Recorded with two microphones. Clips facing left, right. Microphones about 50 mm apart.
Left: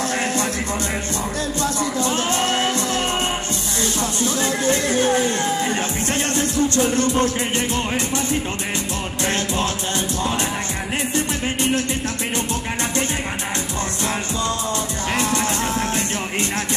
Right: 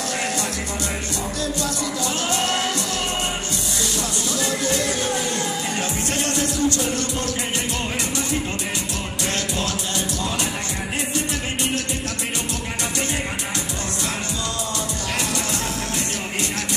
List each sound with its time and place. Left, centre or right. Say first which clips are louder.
1.6 s music: left 4 dB; left
4.4 s music: left 2 dB; left
6.3 s music: left 3 dB; left